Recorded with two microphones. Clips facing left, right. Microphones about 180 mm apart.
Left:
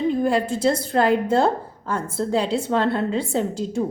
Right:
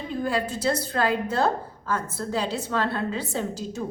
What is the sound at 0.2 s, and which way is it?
A woman's voice, 25° left (ahead or behind).